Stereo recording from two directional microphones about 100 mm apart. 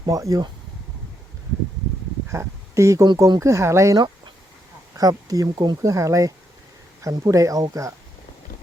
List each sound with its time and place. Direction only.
0.0 s speech: 35° right (ahead or behind)
2.3 s speech: 30° right (ahead or behind)
4.9 s speech: 35° right (ahead or behind)